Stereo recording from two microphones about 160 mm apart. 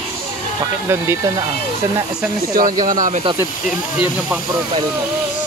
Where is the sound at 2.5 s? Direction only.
55° right (ahead or behind).